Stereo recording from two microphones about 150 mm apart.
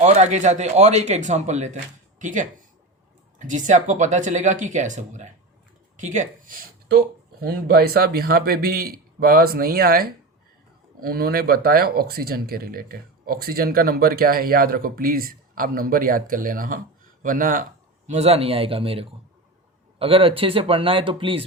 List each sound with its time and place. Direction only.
0.0 s speech: 50° right (ahead or behind); by 6.9 s 65° right (ahead or behind)
7.4 s a man's voice: 90° right; by 21.4 s 35° right (ahead or behind)